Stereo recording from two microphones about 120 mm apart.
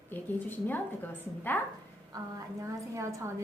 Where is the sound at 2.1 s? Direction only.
30° right (ahead or behind).